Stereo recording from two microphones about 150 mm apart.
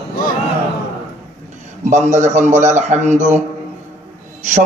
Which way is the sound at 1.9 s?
50° right (ahead or behind).